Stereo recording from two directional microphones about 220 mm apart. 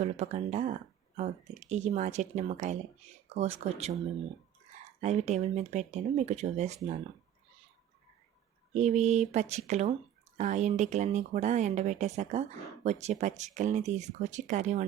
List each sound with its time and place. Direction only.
0.0 s speech: 30° right (ahead or behind)
4.9 s speech: 30° right (ahead or behind)
8.7 s speech: 30° right (ahead or behind)